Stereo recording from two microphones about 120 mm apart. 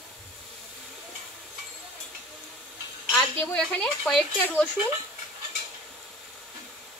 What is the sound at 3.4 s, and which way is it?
Speech, 10° left (ahead or behind).